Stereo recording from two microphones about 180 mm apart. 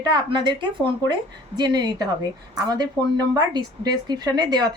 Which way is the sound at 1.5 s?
25° right (ahead or behind).